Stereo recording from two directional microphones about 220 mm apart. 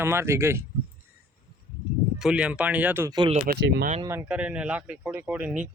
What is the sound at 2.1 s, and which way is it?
Speech, 5° right (ahead or behind).